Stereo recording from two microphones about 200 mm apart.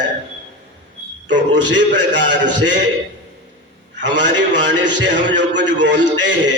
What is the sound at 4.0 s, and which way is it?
A man's voice, 60° right (ahead or behind).